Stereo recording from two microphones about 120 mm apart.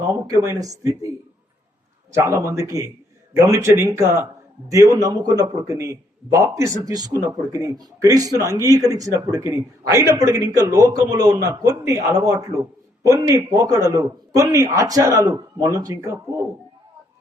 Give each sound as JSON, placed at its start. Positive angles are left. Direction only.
{"t": 0.3, "sound": "a man's voice", "side_deg": -30}
{"t": 2.1, "sound": "a man's voice", "side_deg": -20}